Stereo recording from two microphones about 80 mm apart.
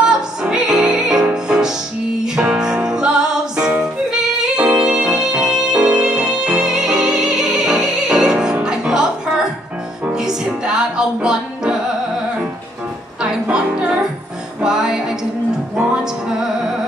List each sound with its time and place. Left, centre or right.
0.0 s music: centre
10.1 s music: centre
13.2 s music: centre